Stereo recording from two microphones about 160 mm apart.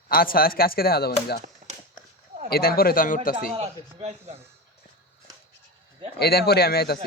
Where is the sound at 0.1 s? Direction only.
65° left (ahead or behind).